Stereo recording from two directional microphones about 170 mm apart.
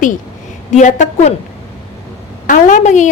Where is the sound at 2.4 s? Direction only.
50° left (ahead or behind).